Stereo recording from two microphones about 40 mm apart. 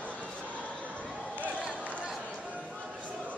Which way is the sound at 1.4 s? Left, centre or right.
Right.